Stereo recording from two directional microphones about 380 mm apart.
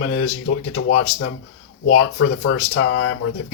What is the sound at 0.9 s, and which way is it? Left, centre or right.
Speech, left.